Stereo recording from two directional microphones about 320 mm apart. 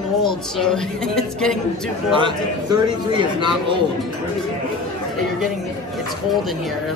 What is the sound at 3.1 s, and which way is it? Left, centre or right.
Speech, centre.